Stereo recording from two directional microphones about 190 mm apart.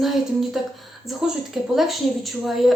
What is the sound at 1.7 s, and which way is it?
Speech, centre (ahead or behind).